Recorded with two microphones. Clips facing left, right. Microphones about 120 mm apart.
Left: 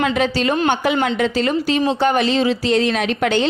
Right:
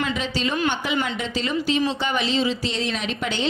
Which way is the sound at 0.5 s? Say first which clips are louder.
Left 4 dB; 40° left (ahead or behind).